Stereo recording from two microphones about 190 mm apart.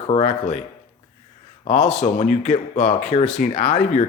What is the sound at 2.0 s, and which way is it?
Speech, 40° left (ahead or behind).